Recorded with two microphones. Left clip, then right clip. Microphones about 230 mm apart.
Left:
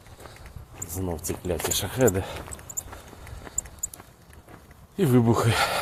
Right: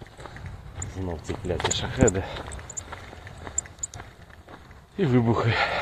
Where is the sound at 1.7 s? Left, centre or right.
Centre.